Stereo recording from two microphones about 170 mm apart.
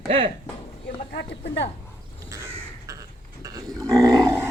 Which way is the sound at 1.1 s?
85° left.